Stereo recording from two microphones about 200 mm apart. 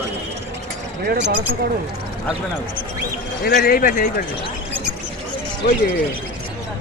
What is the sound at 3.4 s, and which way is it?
Speech, 50° left (ahead or behind).